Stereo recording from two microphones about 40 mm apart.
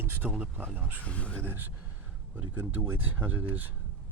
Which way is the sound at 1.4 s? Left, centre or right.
Right.